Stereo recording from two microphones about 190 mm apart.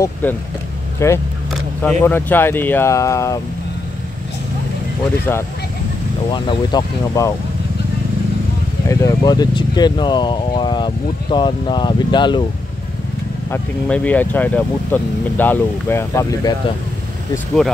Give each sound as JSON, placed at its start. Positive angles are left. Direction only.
{"t": 0.0, "sound": "speech", "side_deg": 10}
{"t": 6.3, "sound": "speech", "side_deg": 25}
{"t": 8.8, "sound": "speech", "side_deg": 20}
{"t": 13.5, "sound": "speech", "side_deg": 5}